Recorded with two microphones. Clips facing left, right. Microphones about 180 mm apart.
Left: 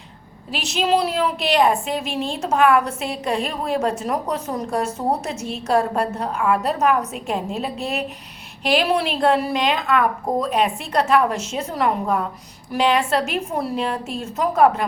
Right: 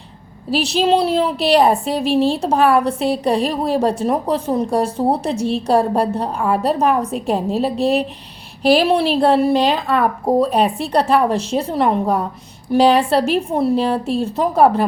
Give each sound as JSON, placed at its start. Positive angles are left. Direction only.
{"t": 0.5, "sound": "a woman's voice", "side_deg": -35}